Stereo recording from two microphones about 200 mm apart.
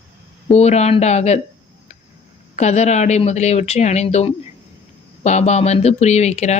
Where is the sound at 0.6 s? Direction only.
35° left (ahead or behind).